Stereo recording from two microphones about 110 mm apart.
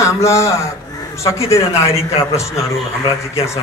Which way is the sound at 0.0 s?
25° left (ahead or behind).